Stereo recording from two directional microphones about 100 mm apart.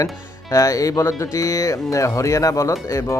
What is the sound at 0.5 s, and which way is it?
Speech, 35° left (ahead or behind).